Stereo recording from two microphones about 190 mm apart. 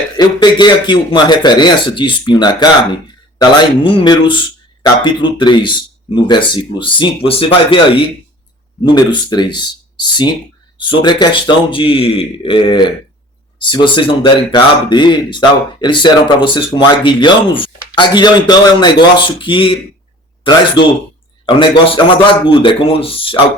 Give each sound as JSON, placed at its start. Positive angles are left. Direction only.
{"t": 0.2, "sound": "speech", "side_deg": 20}
{"t": 21.4, "sound": "speech", "side_deg": 30}